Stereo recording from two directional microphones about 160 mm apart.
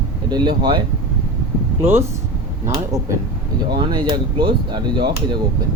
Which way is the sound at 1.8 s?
15° right (ahead or behind).